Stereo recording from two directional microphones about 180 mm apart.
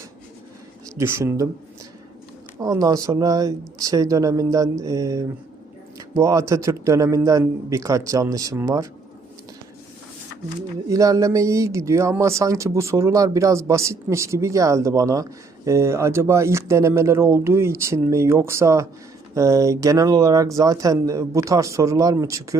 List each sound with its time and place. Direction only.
0.9 s speech: 15° right (ahead or behind)
2.6 s speech: 20° right (ahead or behind)
10.8 s speech: 20° right (ahead or behind)